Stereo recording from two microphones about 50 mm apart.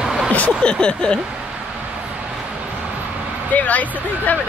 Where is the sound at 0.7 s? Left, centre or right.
Centre.